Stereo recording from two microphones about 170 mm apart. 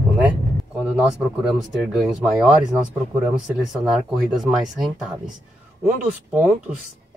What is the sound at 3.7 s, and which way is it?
Speech, centre (ahead or behind).